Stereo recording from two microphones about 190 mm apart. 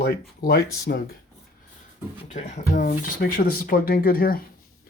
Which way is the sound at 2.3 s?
40° left (ahead or behind).